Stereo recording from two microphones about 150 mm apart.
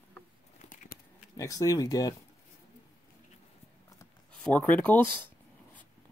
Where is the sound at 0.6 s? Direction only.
60° left (ahead or behind).